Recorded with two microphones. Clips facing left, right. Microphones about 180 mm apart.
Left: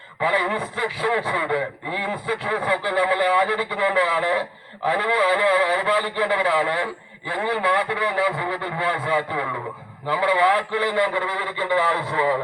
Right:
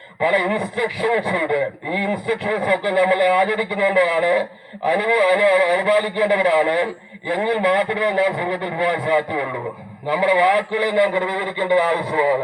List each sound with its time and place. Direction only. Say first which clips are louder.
0.2 s a man's voice: right 4 dB; 15° right (ahead or behind)